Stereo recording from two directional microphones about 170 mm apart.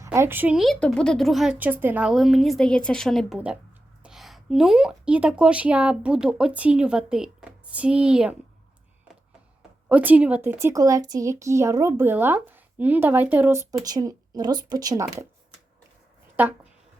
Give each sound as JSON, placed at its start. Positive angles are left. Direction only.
{"t": 0.0, "sound": "a woman's voice", "side_deg": -15}
{"t": 9.9, "sound": "a woman's voice", "side_deg": -10}
{"t": 16.3, "sound": "speech", "side_deg": -10}